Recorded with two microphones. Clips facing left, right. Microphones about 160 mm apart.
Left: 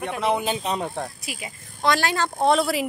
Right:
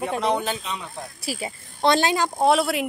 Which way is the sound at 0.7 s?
50° left (ahead or behind).